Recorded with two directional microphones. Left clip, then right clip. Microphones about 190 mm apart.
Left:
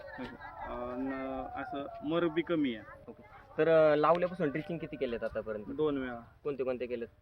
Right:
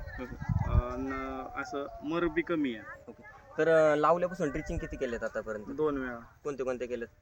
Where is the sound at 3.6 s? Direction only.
5° right (ahead or behind).